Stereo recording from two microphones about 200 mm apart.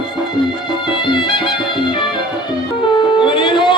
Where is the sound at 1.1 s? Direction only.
25° left (ahead or behind).